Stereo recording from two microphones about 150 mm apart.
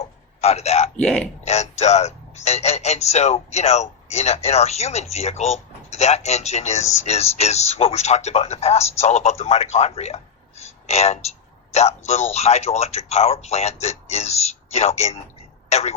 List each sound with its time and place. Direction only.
0.0 s a sound: 45° left (ahead or behind)
0.9 s speech: 5° left (ahead or behind)
1.5 s speech: 50° left (ahead or behind)